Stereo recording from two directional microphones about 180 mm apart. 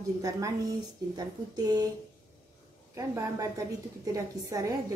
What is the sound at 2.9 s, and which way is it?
A woman's voice, 15° right (ahead or behind).